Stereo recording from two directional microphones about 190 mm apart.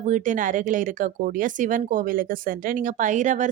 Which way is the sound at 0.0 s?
40° right (ahead or behind).